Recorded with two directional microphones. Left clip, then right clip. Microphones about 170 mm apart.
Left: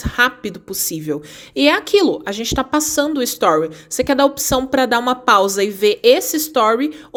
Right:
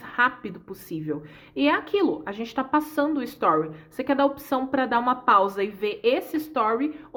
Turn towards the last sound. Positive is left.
turn(degrees=50)  # may be behind; listen again after turning